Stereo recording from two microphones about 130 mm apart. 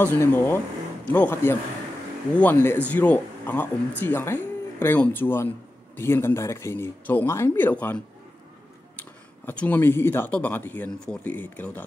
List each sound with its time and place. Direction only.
0.0 s speech: 15° left (ahead or behind)
9.5 s speech: 15° left (ahead or behind)